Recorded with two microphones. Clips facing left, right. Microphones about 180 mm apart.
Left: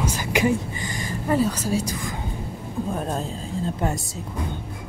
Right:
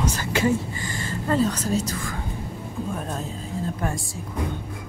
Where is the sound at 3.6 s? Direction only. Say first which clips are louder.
Left 3 dB; 20° left (ahead or behind).